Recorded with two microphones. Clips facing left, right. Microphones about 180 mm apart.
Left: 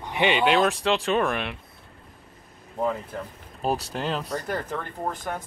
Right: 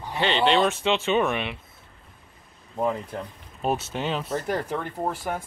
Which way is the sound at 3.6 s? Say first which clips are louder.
Even; centre (ahead or behind).